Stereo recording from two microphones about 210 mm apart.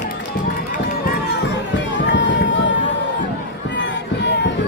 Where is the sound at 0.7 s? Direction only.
50° left (ahead or behind).